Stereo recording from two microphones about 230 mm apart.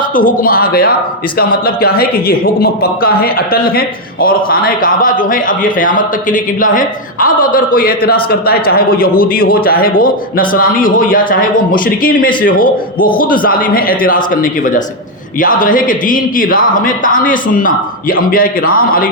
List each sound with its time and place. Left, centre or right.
0.1 s a man's voice: left